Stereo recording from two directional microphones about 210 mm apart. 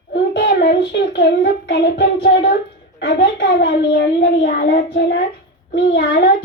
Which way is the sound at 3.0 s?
50° left (ahead or behind).